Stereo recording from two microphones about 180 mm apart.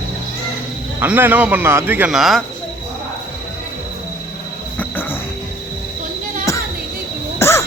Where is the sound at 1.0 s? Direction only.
10° right (ahead or behind).